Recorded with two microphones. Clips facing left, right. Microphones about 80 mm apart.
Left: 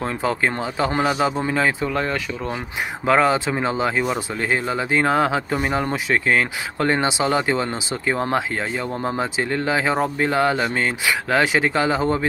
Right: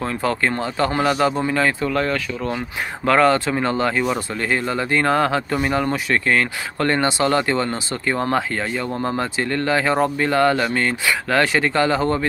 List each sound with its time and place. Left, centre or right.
0.5 s speech: centre